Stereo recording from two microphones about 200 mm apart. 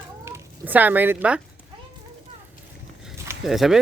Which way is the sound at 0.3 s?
10° right (ahead or behind).